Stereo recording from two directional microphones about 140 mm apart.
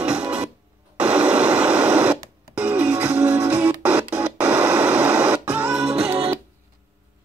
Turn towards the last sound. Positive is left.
turn(degrees=-5)  # may be behind; listen again after turning